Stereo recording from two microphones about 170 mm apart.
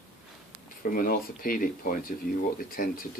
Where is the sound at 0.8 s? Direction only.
55° left (ahead or behind).